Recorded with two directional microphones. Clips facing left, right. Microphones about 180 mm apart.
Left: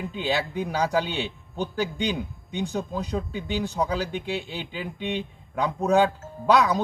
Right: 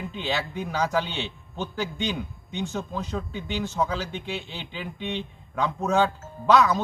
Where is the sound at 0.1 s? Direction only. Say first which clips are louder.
Left 4 dB; 15° left (ahead or behind).